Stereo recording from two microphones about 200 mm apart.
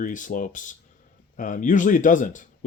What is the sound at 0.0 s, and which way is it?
Speech, 40° left (ahead or behind).